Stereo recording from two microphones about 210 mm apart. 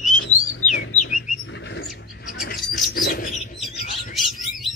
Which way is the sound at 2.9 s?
45° left (ahead or behind).